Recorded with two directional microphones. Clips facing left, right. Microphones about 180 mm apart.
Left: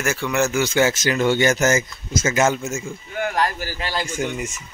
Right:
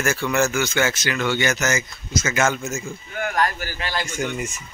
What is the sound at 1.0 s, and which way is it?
Speech, 45° left (ahead or behind).